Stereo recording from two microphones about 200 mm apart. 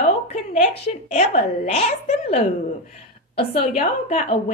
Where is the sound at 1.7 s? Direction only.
35° left (ahead or behind).